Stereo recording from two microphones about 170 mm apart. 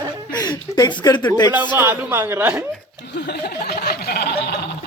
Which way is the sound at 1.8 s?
15° right (ahead or behind).